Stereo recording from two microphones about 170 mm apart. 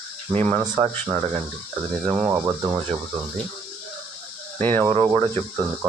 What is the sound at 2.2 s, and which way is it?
Speech, 20° right (ahead or behind).